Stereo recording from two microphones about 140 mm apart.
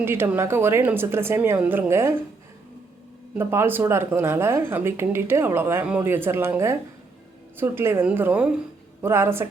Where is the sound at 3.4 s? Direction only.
15° right (ahead or behind).